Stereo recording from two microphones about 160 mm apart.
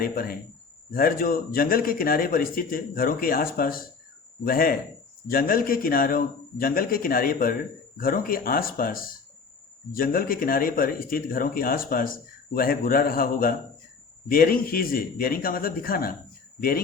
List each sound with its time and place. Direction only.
0.0 s a man's voice: 65° left (ahead or behind)